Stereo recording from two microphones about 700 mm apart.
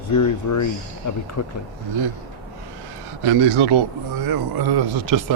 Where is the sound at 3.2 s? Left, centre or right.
Right.